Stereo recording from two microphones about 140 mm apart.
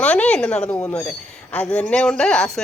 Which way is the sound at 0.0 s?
10° left (ahead or behind).